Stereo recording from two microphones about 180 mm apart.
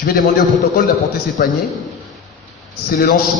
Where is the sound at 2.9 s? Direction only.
55° left (ahead or behind).